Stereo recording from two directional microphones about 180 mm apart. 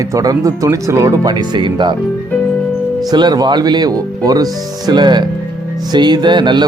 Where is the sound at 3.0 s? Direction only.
25° right (ahead or behind).